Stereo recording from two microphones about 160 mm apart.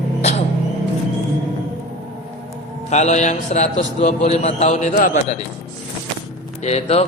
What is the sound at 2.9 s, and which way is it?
A man's voice, 45° left (ahead or behind).